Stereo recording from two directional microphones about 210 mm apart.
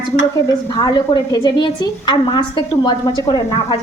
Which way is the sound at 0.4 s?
20° left (ahead or behind).